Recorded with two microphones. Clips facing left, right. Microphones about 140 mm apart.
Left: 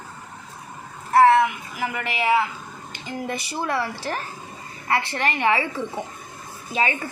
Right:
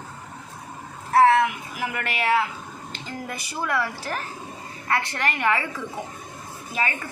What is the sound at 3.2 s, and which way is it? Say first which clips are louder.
Speech: left 3 dB; 25° left (ahead or behind).